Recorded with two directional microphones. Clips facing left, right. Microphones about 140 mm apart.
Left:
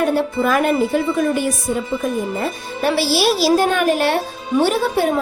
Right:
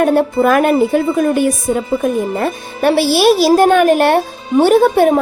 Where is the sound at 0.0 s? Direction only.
50° right (ahead or behind).